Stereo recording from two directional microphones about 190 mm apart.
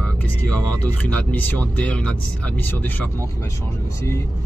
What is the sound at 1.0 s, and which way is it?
Speech, 10° left (ahead or behind).